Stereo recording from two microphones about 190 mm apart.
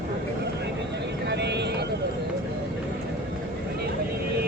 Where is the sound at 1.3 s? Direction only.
65° right (ahead or behind).